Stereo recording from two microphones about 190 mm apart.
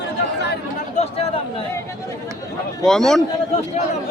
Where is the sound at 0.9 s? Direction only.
30° left (ahead or behind).